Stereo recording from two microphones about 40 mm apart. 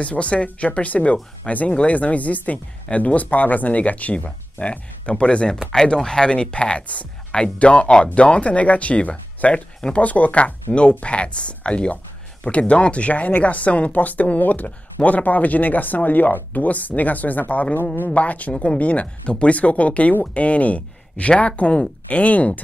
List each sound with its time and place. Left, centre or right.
0.0 s speech: left
18.5 s speech: left
18.8 s speech: left